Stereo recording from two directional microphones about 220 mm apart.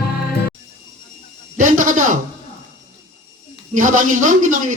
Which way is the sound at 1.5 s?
35° right (ahead or behind).